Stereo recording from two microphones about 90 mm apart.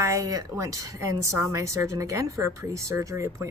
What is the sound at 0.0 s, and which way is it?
A woman's voice, 35° right (ahead or behind).